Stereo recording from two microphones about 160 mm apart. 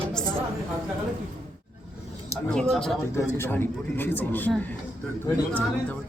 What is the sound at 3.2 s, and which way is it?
Speech, 15° left (ahead or behind).